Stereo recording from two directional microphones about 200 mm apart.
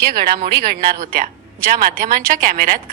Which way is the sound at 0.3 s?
45° right (ahead or behind).